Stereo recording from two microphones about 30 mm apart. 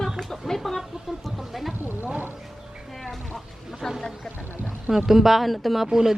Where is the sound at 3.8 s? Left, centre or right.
Centre.